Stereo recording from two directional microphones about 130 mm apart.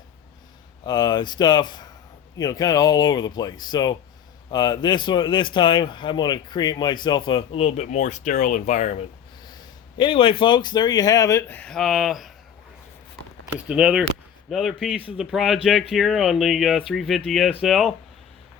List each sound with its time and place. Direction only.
0.9 s speech: 35° left (ahead or behind); by 9.0 s 60° left (ahead or behind)
10.0 s speech: 45° left (ahead or behind); by 12.3 s centre (ahead or behind)
13.7 s speech: 10° right (ahead or behind)